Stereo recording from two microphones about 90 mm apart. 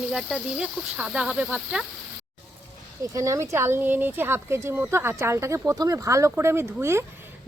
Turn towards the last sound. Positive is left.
turn(degrees=-30)  # may be behind; listen again after turning